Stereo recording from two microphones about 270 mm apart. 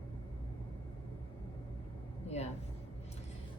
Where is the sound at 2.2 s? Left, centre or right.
Left.